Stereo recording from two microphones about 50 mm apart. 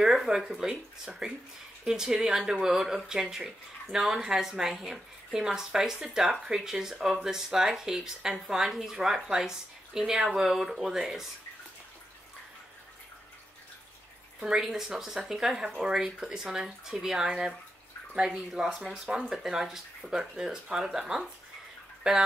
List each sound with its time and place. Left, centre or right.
0.0 s speech: centre
14.4 s speech: centre
18.5 s speech: centre